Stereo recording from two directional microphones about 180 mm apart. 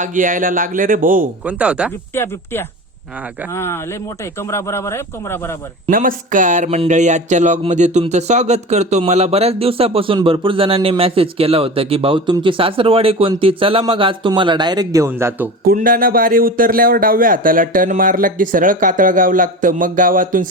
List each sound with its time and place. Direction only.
0.0 s speech: 45° right (ahead or behind)
1.5 s speech: 5° right (ahead or behind)
2.1 s a man's voice: 15° left (ahead or behind)
5.9 s speech: 50° right (ahead or behind); by 15.4 s 15° right (ahead or behind)
15.6 s speech: 50° right (ahead or behind)